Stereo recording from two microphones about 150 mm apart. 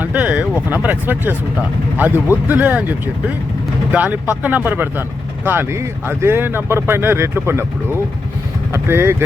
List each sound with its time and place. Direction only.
0.0 s speech: 10° right (ahead or behind)